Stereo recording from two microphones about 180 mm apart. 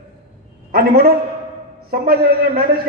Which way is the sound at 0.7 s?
60° right (ahead or behind).